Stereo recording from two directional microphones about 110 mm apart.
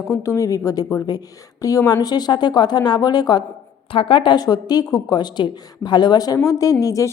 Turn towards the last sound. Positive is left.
turn(degrees=30)  # may be behind; listen again after turning